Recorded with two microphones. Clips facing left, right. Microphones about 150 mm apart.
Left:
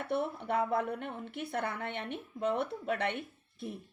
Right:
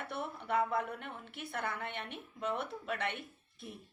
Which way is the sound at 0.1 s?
50° left (ahead or behind).